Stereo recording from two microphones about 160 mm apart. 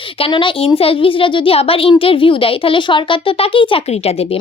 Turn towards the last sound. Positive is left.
turn(degrees=35)  # may be behind; listen again after turning